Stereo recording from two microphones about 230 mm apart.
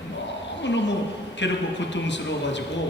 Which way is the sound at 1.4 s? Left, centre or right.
Left.